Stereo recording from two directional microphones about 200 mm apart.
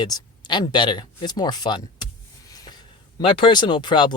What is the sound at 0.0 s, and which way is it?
Speech, 20° left (ahead or behind).